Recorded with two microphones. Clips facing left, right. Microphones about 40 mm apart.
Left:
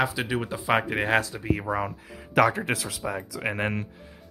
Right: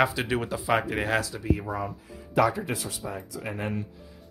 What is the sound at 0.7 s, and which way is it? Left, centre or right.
Speech, centre.